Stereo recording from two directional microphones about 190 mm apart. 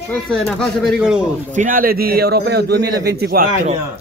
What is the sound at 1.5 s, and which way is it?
A man's voice, 45° right (ahead or behind).